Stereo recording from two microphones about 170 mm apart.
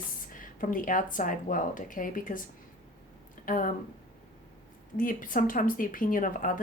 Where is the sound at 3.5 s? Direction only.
50° left (ahead or behind).